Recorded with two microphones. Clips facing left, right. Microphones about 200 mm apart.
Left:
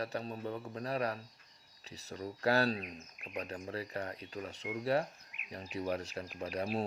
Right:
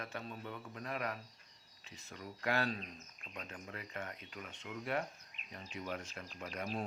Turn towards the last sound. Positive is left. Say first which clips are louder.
# left 7 dB
turn(degrees=35)  # may be behind; listen again after turning